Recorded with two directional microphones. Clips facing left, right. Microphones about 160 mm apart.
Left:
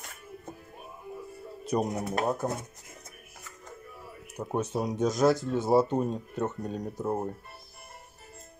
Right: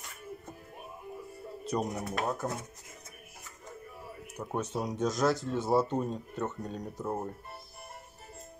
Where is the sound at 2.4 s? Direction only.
20° left (ahead or behind).